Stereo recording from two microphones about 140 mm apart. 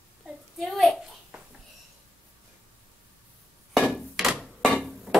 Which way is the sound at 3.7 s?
Centre (ahead or behind).